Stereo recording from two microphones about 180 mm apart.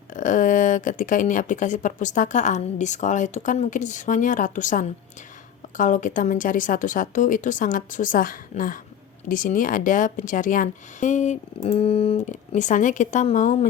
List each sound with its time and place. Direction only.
0.1 s speech: 45° left (ahead or behind)